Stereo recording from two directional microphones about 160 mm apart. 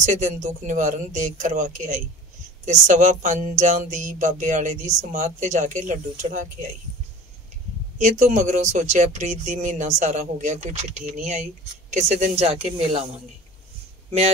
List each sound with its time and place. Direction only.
0.0 s speech: 50° right (ahead or behind)
8.0 s speech: 45° right (ahead or behind)